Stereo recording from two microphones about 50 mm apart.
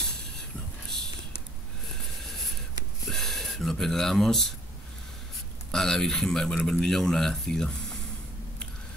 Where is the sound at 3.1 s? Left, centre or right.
Centre.